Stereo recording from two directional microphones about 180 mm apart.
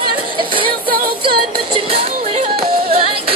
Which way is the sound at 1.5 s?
30° right (ahead or behind).